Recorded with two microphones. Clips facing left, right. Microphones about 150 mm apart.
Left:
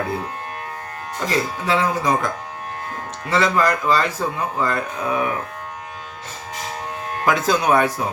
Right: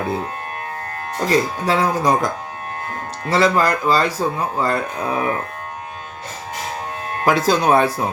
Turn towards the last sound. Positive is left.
turn(degrees=-30)  # may be behind; listen again after turning